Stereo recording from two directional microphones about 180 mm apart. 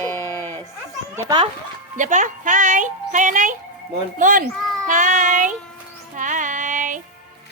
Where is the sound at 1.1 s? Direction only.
20° right (ahead or behind).